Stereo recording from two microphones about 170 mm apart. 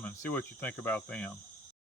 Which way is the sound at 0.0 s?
10° left (ahead or behind).